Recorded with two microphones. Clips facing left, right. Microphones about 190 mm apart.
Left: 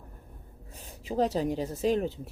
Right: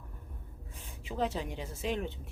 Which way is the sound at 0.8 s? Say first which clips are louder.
Left 6 dB; 40° left (ahead or behind).